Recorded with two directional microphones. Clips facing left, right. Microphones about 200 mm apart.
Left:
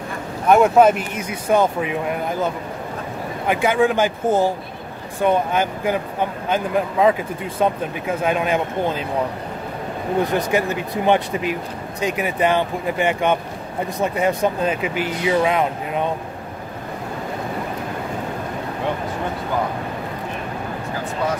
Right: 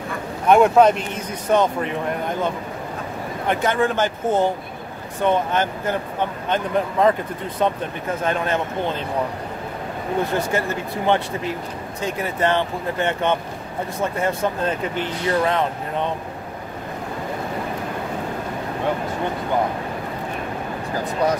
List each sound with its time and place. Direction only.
0.5 s speech: 5° left (ahead or behind)
10.3 s speech: 15° left (ahead or behind)